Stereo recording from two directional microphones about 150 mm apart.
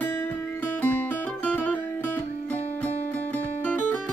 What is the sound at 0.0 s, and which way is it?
Music, 15° left (ahead or behind).